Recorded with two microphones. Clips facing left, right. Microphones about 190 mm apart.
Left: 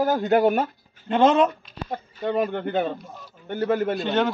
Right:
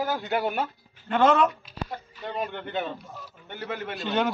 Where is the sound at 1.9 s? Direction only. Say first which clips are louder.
Left 11 dB; 45° left (ahead or behind).